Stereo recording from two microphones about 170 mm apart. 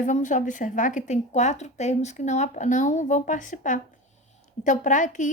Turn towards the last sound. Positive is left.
turn(degrees=50)  # may be behind; listen again after turning